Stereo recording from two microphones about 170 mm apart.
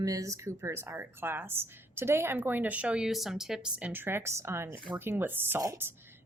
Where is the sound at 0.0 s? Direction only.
20° right (ahead or behind).